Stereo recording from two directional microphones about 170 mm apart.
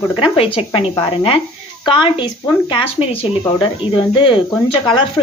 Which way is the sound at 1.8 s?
30° left (ahead or behind).